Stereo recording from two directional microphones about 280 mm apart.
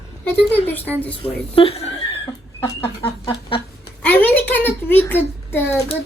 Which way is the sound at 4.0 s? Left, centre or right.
Centre.